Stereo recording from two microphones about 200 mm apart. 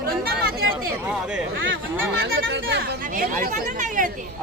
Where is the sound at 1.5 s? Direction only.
70° right (ahead or behind).